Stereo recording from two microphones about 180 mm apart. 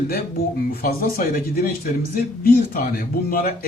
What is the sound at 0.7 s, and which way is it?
A man's voice, 55° left (ahead or behind).